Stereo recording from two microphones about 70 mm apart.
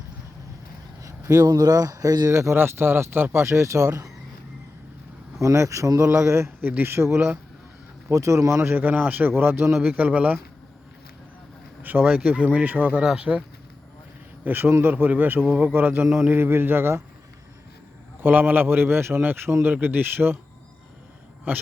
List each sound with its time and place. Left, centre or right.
1.0 s speech: right
2.3 s speech: right
5.4 s speech: right
6.6 s speech: right
8.1 s speech: right
8.6 s a man's voice: right
9.8 s a man's voice: right
11.8 s a man's voice: right
13.0 s speech: centre
14.4 s a man's voice: right
18.2 s a man's voice: right